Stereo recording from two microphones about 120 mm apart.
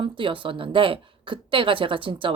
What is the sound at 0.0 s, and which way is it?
Speech, 45° right (ahead or behind).